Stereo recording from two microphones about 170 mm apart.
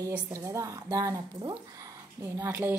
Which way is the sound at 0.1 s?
15° right (ahead or behind).